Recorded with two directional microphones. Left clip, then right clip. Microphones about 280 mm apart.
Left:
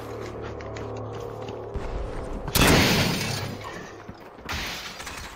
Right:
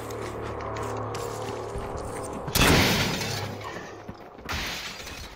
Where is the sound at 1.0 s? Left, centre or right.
Right.